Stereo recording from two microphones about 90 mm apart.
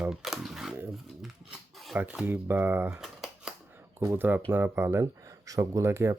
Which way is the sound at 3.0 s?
5° right (ahead or behind).